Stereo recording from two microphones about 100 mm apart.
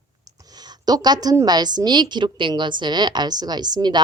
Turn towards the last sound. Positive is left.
turn(degrees=-45)  # may be behind; listen again after turning